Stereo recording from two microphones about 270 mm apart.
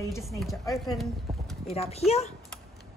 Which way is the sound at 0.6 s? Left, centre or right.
Centre.